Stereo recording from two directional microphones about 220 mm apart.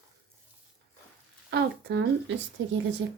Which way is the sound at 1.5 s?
50° right (ahead or behind).